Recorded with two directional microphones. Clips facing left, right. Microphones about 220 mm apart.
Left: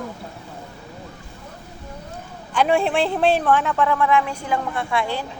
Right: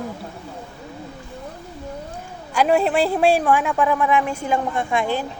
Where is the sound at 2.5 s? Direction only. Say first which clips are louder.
Right 1 dB; 5° right (ahead or behind); by 4.8 s 25° right (ahead or behind).